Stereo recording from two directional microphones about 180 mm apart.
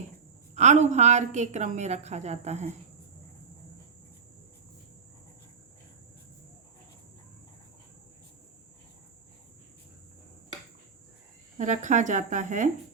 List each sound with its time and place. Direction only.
0.5 s a woman's voice: 40° right (ahead or behind)
11.5 s speech: 45° right (ahead or behind)